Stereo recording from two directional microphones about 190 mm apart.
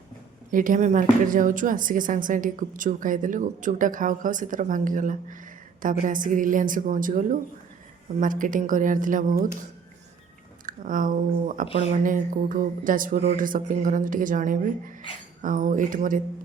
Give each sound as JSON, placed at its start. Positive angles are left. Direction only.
{"t": 0.5, "sound": "speech", "side_deg": -45}
{"t": 10.7, "sound": "speech", "side_deg": -45}